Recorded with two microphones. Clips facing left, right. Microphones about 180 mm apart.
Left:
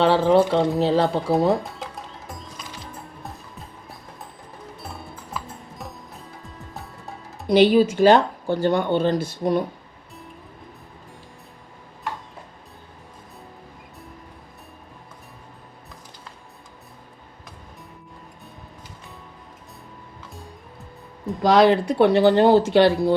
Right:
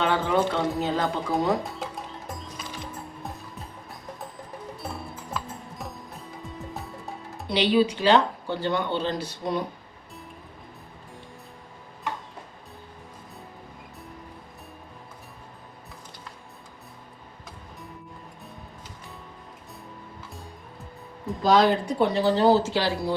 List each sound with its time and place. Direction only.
0.0 s speech: 30° left (ahead or behind)
1.6 s music: centre (ahead or behind)
4.8 s music: centre (ahead or behind)
7.4 s speech: 45° left (ahead or behind)
21.4 s speech: 70° left (ahead or behind)